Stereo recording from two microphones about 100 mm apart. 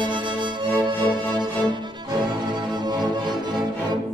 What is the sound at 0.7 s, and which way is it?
Music, 25° left (ahead or behind).